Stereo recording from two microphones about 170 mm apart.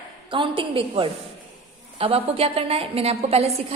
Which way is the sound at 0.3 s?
30° right (ahead or behind).